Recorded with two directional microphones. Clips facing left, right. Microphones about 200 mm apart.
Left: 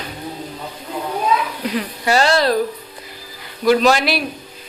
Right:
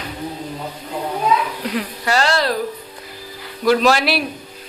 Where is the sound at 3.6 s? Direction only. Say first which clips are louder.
Left 1 dB; centre (ahead or behind).